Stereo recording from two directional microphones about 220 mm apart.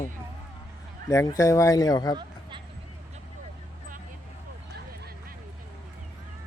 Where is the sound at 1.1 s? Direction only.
15° left (ahead or behind).